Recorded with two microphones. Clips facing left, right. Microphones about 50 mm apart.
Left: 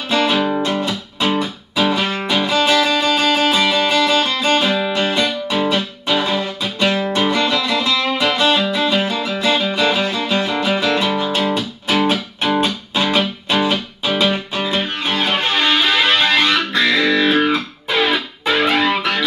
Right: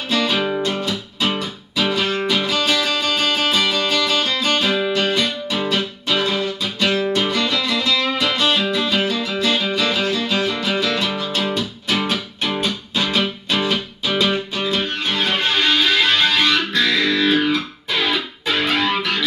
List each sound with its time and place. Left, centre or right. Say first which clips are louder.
0.1 s music: left 3 dB; left